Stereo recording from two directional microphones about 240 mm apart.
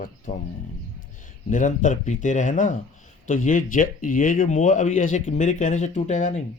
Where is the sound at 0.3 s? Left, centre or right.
Left.